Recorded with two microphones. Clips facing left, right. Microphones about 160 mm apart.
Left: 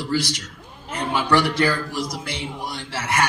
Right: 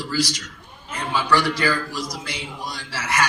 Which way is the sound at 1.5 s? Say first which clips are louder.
Left 2 dB; 20° left (ahead or behind).